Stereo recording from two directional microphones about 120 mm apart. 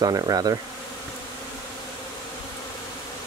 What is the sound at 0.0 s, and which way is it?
Speech, 30° right (ahead or behind).